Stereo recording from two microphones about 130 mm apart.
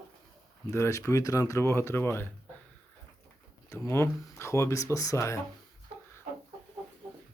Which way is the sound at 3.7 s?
20° left (ahead or behind).